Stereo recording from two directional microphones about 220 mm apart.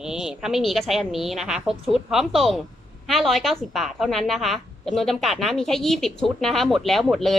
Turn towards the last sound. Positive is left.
turn(degrees=0)  # may be behind; listen again after turning